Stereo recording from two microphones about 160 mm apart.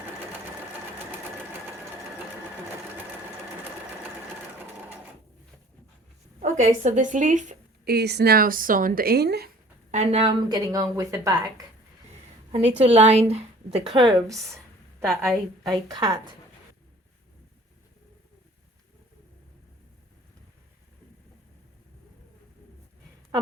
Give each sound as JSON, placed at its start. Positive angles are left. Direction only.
{"t": 0.9, "sound": "sewing machine", "side_deg": -15}
{"t": 6.4, "sound": "speech", "side_deg": -50}
{"t": 7.9, "sound": "speech", "side_deg": -90}
{"t": 9.9, "sound": "speech", "side_deg": -45}
{"t": 10.5, "sound": "a woman's voice", "side_deg": -25}
{"t": 12.5, "sound": "a woman's voice", "side_deg": -40}
{"t": 15.0, "sound": "a woman's voice", "side_deg": 0}
{"t": 15.9, "sound": "a woman's voice", "side_deg": -25}